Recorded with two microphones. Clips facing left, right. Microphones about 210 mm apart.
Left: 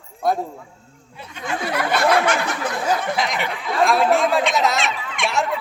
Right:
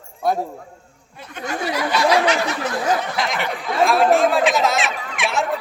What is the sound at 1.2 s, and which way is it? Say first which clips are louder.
Speech: right 1 dB; 50° right (ahead or behind).